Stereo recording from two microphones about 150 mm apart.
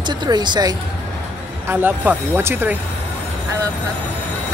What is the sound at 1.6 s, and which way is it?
Speech, 10° right (ahead or behind).